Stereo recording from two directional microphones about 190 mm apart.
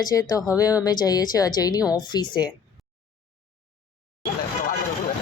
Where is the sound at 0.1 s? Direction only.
20° left (ahead or behind).